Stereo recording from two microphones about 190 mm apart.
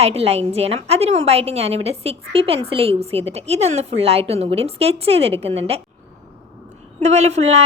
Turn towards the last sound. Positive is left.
turn(degrees=-35)  # may be behind; listen again after turning